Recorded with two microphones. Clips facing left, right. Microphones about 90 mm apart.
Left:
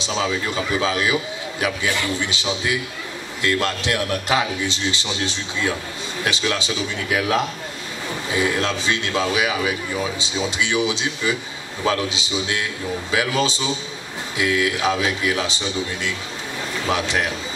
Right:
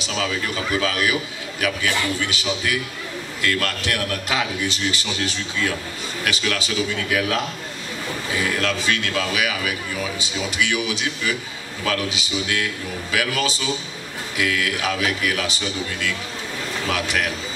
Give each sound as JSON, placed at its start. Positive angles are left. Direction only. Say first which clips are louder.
{"t": 0.0, "sound": "a man's voice", "louder": "left 2 dB", "side_deg": 25}